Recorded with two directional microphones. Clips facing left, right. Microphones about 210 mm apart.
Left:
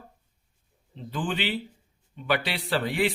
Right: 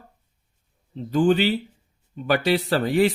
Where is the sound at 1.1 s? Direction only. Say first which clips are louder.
Right 10 dB; 45° right (ahead or behind).